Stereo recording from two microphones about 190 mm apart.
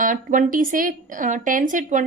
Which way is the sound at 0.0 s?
45° right (ahead or behind).